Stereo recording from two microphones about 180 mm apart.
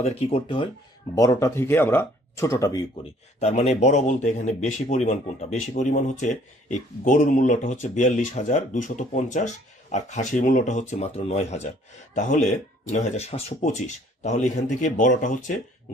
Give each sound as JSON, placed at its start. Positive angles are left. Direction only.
{"t": 0.0, "sound": "speech", "side_deg": 35}
{"t": 1.1, "sound": "speech", "side_deg": 20}
{"t": 3.0, "sound": "speech", "side_deg": 35}